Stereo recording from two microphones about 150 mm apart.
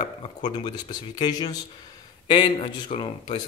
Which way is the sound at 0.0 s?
30° left (ahead or behind).